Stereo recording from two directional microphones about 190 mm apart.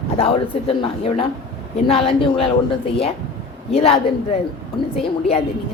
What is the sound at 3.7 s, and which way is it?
A woman's voice, 30° left (ahead or behind).